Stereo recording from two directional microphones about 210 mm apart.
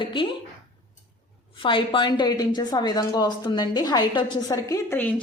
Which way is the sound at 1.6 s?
25° left (ahead or behind).